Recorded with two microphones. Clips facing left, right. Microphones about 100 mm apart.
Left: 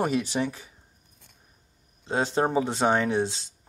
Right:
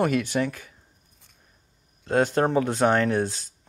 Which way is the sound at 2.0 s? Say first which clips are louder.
Right 3 dB; 5° left (ahead or behind).